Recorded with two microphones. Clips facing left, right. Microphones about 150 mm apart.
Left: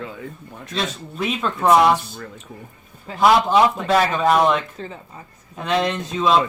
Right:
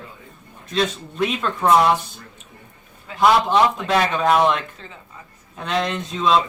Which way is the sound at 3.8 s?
Centre (ahead or behind).